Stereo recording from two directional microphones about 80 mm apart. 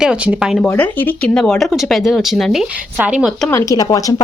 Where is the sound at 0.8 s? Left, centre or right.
Left.